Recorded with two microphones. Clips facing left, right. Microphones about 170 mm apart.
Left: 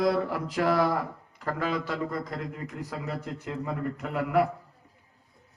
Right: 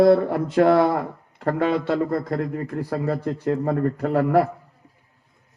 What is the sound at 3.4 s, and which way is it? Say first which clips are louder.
Speech: right 11 dB; 55° right (ahead or behind).